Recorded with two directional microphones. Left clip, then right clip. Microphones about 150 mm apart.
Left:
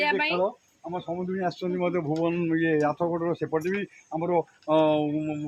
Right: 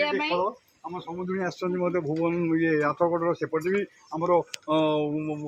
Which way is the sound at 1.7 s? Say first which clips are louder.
Right 1 dB; 15° left (ahead or behind).